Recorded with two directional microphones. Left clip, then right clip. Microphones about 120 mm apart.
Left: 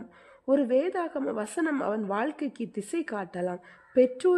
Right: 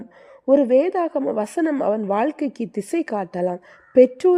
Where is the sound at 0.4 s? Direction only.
30° right (ahead or behind).